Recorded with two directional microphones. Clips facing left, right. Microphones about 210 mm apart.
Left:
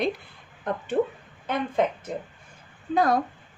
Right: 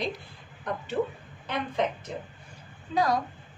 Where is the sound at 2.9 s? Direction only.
55° left (ahead or behind).